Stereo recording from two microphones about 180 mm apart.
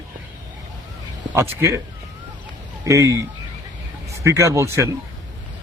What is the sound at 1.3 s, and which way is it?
Speech, 15° right (ahead or behind).